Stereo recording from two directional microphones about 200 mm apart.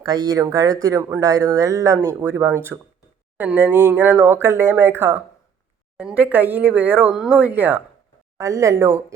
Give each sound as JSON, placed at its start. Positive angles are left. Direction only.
{"t": 0.0, "sound": "speech", "side_deg": -20}